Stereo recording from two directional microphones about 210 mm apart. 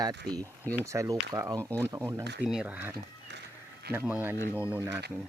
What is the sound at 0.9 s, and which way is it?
Speech, 15° right (ahead or behind).